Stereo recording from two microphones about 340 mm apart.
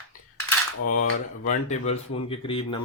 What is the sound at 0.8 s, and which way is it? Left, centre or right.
Cap gun, left.